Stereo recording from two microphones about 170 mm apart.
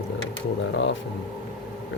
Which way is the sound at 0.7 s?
90° left.